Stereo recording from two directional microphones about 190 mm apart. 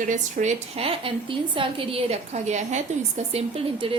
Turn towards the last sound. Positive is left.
turn(degrees=-30)  # may be behind; listen again after turning